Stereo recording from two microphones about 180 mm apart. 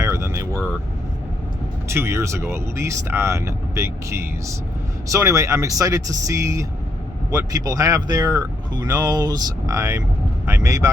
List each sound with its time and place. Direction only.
0.0 s vehicle: 15° right (ahead or behind)
1.9 s speech: 15° right (ahead or behind)